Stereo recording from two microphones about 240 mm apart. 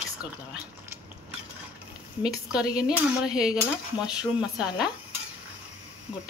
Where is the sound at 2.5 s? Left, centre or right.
Centre.